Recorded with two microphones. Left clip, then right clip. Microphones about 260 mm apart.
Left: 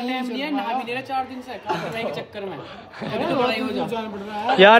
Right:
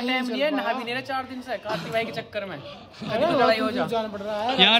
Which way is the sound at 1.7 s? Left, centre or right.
Centre.